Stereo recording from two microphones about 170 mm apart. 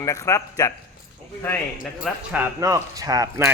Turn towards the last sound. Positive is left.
turn(degrees=-20)  # may be behind; listen again after turning